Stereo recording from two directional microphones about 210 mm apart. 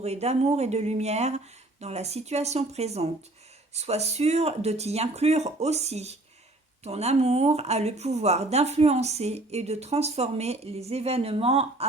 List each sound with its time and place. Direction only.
0.0 s speech: 30° right (ahead or behind)